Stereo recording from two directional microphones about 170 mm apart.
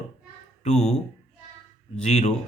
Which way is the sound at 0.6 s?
40° left (ahead or behind).